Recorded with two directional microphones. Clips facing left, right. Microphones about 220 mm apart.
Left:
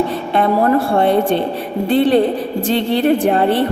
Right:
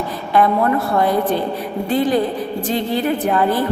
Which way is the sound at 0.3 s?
30° left (ahead or behind).